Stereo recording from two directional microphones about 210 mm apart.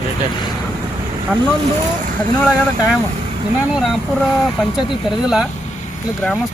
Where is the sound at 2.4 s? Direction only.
5° right (ahead or behind).